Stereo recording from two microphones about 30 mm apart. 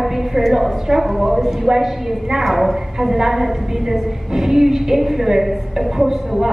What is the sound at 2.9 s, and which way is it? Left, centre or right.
A woman's voice, centre.